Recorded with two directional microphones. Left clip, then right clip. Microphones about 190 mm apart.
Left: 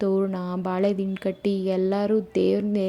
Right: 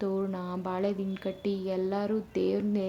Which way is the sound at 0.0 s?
30° left (ahead or behind).